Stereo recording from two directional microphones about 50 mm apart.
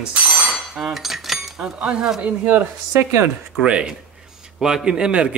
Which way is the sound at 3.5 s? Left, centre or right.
Right.